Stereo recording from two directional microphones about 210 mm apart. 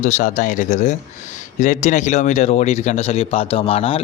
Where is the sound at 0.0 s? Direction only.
35° left (ahead or behind).